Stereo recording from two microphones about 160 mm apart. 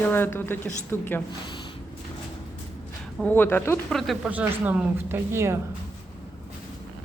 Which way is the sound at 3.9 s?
Centre (ahead or behind).